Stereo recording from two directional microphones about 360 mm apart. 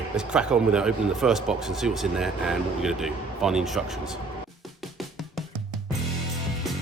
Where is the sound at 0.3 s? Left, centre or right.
Centre.